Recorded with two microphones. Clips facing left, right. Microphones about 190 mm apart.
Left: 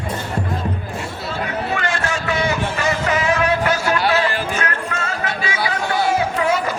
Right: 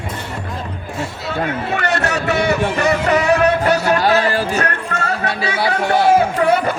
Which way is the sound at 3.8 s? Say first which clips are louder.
Right 3 dB; 40° right (ahead or behind).